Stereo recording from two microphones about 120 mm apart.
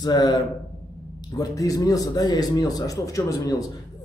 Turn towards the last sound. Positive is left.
turn(degrees=30)  # may be behind; listen again after turning